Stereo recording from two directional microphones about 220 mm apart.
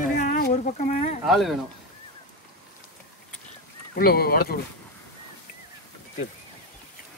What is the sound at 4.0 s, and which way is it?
Speech, 45° left (ahead or behind).